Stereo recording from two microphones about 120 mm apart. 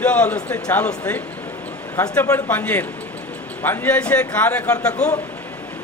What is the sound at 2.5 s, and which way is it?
A man's voice, 15° left (ahead or behind).